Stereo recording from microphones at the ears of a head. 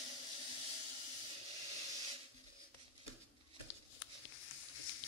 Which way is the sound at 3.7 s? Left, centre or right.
Left.